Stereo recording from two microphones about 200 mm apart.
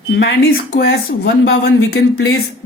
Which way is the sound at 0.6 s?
55° left (ahead or behind).